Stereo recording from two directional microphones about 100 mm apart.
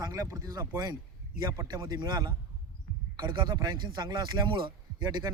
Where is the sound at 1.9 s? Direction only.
45° right (ahead or behind).